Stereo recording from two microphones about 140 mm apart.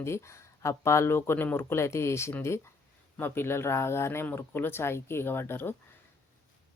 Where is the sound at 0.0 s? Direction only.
20° left (ahead or behind).